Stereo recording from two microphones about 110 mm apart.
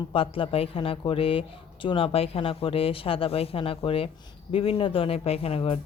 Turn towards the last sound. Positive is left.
turn(degrees=60)  # may be behind; listen again after turning